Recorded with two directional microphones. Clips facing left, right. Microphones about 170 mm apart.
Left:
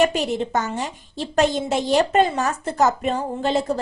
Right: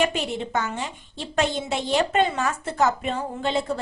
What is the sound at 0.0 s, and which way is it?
A woman's voice, 40° left (ahead or behind).